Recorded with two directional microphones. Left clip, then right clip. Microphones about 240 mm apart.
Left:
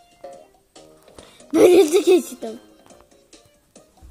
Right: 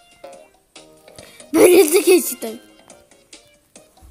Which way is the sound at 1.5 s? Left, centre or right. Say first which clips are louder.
Right 2 dB; centre.